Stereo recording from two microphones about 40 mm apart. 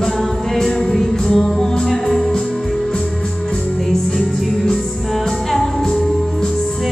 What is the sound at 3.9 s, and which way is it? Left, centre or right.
Music, centre.